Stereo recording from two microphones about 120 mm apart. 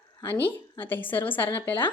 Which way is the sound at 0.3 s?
15° left (ahead or behind).